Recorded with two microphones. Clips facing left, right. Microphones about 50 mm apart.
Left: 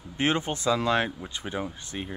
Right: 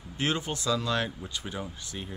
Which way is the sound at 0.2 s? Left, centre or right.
Left.